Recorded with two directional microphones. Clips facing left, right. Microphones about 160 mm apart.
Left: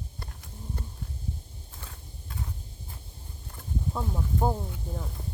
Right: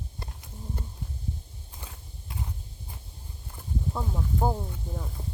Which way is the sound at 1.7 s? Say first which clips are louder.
Right 1 dB; 15° right (ahead or behind).